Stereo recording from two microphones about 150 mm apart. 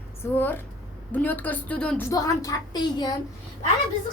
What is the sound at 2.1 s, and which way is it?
A woman's voice, 25° left (ahead or behind).